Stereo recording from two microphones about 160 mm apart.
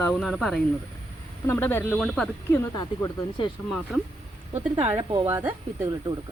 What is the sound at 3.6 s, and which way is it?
Speech, centre (ahead or behind).